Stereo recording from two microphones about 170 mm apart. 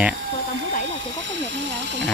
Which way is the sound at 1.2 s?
90° right.